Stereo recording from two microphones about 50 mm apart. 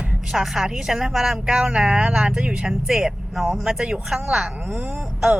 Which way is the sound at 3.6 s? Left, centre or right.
Centre.